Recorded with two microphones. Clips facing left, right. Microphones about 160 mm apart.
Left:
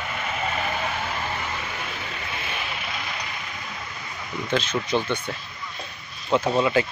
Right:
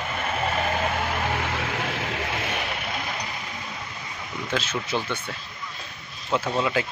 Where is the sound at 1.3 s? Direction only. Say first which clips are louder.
Right 4 dB; 80° right.